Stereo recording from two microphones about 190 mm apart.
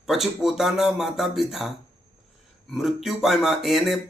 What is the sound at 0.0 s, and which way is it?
Speech, centre (ahead or behind).